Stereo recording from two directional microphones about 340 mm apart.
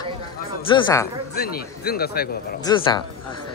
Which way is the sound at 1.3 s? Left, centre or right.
Left.